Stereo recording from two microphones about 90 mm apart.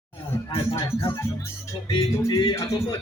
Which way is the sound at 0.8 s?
35° left (ahead or behind).